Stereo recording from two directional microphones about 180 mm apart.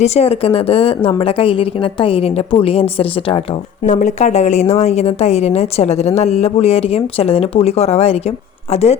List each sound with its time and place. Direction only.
0.0 s a woman's voice: 35° left (ahead or behind)
3.8 s a woman's voice: 40° left (ahead or behind)